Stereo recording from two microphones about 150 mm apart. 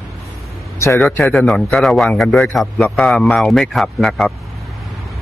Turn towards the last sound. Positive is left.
turn(degrees=0)  # may be behind; listen again after turning